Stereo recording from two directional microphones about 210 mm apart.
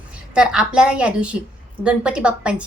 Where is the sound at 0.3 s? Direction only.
5° right (ahead or behind).